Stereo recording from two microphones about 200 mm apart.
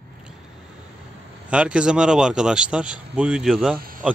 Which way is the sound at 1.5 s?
5° right (ahead or behind).